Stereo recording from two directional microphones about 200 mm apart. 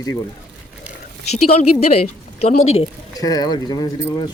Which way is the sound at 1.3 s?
30° left (ahead or behind).